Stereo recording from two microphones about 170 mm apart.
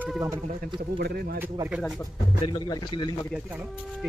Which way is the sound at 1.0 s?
65° right (ahead or behind).